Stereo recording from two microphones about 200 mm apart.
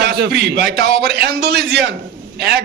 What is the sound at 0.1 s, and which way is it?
A man's voice, 55° right (ahead or behind).